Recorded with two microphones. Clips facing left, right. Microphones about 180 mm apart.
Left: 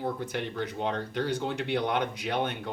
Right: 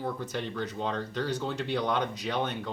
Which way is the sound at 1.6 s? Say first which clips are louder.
Even; 60° left (ahead or behind).